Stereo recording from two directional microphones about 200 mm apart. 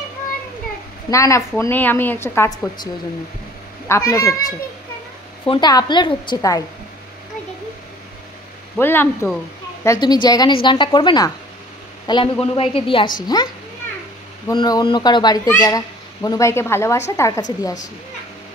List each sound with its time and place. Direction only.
1.1 s a woman's voice: 15° left (ahead or behind)
8.7 s a woman's voice: 10° left (ahead or behind)
9.8 s a woman's voice: 20° left (ahead or behind)
14.5 s a woman's voice: 20° left (ahead or behind)